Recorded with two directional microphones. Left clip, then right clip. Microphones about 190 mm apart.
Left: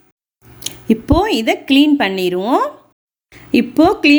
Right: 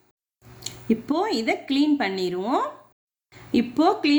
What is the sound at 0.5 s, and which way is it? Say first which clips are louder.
A woman's voice: left 8 dB; 35° left (ahead or behind).